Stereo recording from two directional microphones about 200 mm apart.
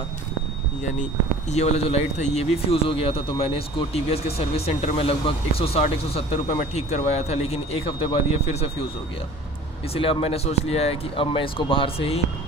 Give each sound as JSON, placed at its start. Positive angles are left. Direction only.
{"t": 1.5, "sound": "speech", "side_deg": 35}
{"t": 9.9, "sound": "speech", "side_deg": 30}